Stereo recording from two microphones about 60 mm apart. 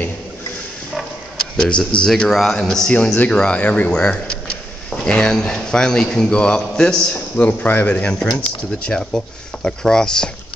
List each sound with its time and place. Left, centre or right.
1.6 s a man's voice: centre
7.4 s speech: left
8.1 s a man's voice: centre